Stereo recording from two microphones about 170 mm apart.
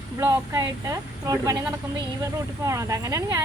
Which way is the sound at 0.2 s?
20° right (ahead or behind).